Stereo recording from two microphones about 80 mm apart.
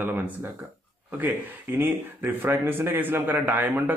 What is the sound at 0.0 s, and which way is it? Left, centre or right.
Speech, right.